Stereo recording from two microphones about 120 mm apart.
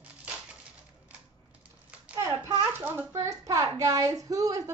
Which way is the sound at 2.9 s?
20° right (ahead or behind).